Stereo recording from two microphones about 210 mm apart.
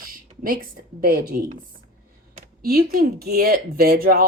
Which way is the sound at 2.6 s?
45° right (ahead or behind).